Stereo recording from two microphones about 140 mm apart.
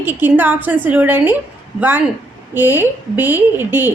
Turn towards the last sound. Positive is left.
turn(degrees=-15)  # may be behind; listen again after turning